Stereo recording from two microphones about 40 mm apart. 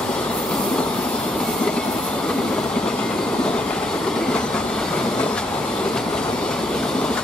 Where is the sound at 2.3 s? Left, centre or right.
Left.